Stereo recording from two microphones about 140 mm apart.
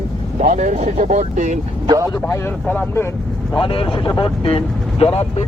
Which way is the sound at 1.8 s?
25° right (ahead or behind).